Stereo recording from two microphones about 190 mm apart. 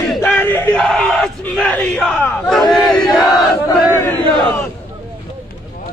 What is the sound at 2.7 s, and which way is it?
Battle cry, centre (ahead or behind).